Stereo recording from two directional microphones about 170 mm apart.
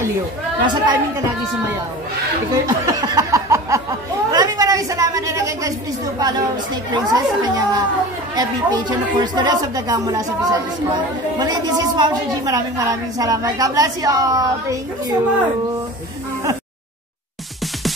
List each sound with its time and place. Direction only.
0.6 s a woman's voice: 25° right (ahead or behind)
2.5 s a sound: 20° right (ahead or behind)
4.3 s a woman's voice: 25° right (ahead or behind)